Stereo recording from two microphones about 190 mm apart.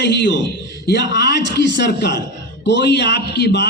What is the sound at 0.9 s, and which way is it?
A man's voice, 65° left (ahead or behind).